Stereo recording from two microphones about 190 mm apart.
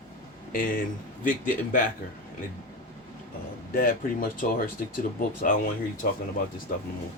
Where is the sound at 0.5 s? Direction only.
45° left (ahead or behind).